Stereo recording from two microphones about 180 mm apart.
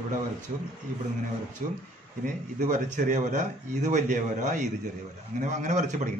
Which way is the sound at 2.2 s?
45° right (ahead or behind).